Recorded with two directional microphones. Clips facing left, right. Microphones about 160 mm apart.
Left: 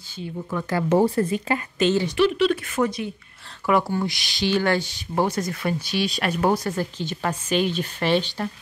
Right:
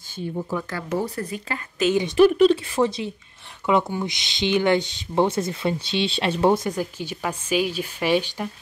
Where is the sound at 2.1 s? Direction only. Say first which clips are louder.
Right 8 dB; 40° right (ahead or behind).